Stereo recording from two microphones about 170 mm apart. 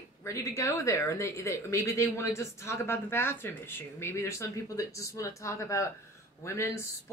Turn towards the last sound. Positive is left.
turn(degrees=15)  # may be behind; listen again after turning